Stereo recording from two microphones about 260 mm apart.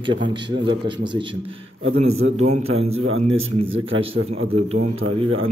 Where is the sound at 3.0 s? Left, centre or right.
Right.